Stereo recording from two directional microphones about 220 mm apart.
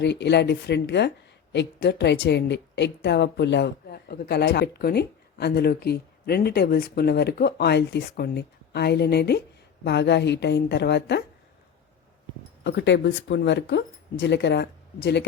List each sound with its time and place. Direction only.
0.0 s a woman's voice: 50° left (ahead or behind)
12.6 s a woman's voice: 55° left (ahead or behind)